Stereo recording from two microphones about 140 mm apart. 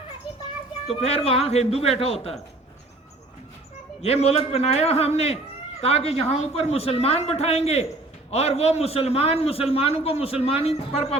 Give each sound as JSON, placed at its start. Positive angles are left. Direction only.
{"t": 0.9, "sound": "a man's voice", "side_deg": 45}
{"t": 4.0, "sound": "a man's voice", "side_deg": 45}